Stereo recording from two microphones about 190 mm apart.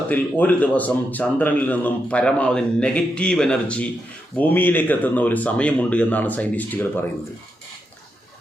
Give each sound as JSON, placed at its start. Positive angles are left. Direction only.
{"t": 0.1, "sound": "speech", "side_deg": 10}